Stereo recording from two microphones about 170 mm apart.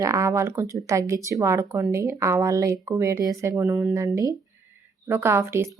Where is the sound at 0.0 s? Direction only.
15° right (ahead or behind).